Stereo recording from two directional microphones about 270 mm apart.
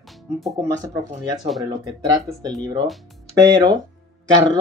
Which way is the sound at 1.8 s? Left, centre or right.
Centre.